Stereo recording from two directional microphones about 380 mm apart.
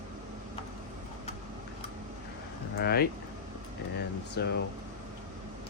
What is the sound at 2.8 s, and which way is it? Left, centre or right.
Speech, left.